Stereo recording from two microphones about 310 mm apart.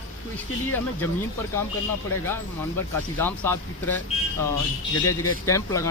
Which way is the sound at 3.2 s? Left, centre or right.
Centre.